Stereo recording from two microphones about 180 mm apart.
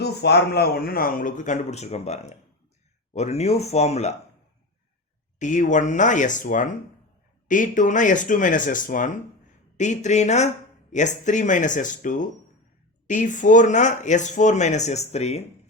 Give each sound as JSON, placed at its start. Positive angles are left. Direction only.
{"t": 0.0, "sound": "a man's voice", "side_deg": 65}
{"t": 5.4, "sound": "a man's voice", "side_deg": 45}